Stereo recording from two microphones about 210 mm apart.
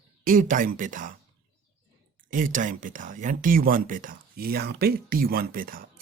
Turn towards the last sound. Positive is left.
turn(degrees=-45)  # may be behind; listen again after turning